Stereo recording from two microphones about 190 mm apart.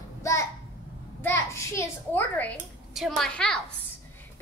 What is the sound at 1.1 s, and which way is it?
A woman's voice, 15° left (ahead or behind).